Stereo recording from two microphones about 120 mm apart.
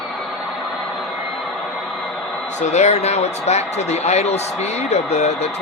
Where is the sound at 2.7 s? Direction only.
70° left (ahead or behind).